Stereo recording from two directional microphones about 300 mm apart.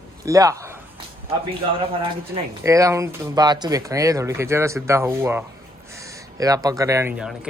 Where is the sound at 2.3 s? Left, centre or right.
Centre.